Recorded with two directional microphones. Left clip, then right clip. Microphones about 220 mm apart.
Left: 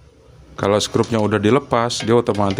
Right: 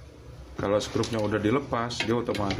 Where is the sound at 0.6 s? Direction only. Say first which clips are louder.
Left 9 dB; 55° left (ahead or behind).